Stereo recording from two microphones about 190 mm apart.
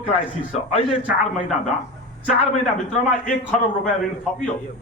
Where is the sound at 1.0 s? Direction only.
Centre (ahead or behind).